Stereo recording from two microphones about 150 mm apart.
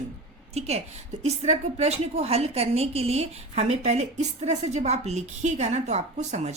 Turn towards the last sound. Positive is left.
turn(degrees=-50)  # may be behind; listen again after turning